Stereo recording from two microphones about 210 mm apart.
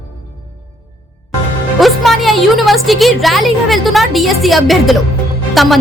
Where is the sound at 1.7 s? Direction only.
Centre (ahead or behind).